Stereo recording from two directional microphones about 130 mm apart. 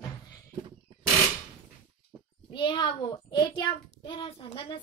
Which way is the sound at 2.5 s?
40° left (ahead or behind).